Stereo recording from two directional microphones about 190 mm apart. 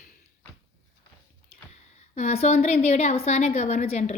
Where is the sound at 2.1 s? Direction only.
35° left (ahead or behind).